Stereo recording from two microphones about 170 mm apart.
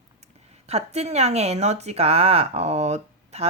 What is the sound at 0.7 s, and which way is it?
Speech, 40° right (ahead or behind).